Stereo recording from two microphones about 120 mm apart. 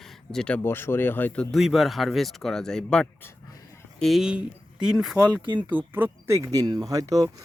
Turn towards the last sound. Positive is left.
turn(degrees=-30)  # may be behind; listen again after turning